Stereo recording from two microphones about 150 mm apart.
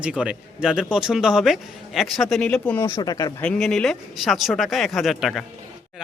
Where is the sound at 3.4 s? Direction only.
5° left (ahead or behind).